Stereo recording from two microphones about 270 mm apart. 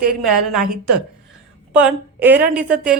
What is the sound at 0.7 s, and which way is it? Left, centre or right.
Speech, right.